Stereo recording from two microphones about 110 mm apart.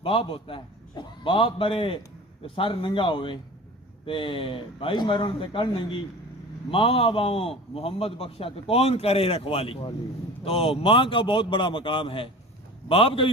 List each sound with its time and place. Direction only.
0.0 s a man's voice: 55° left (ahead or behind)